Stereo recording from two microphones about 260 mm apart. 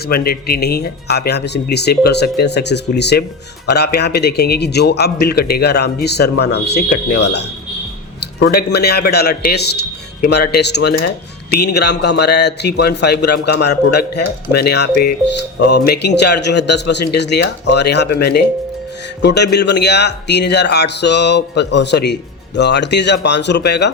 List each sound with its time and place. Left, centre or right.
0.1 s a man's voice: left